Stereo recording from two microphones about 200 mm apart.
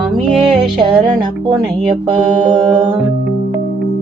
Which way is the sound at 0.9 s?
25° right (ahead or behind).